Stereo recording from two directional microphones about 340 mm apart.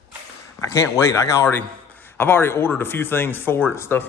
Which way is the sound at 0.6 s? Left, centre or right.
Centre.